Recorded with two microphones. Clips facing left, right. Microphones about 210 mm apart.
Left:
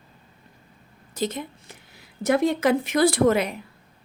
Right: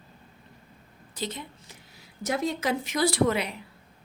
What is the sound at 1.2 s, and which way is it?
Speech, 45° left (ahead or behind).